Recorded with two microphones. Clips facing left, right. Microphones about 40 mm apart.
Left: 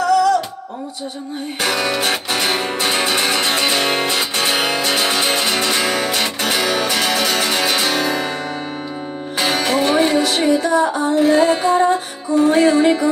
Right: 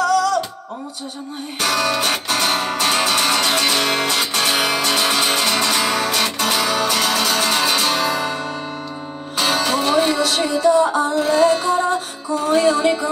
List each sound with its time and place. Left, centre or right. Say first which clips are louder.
0.0 s music: left 3 dB; left
1.6 s music: even; left
9.4 s music: left 1 dB; left